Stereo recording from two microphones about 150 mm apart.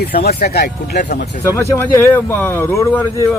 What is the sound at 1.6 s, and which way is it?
A man's voice, 15° left (ahead or behind).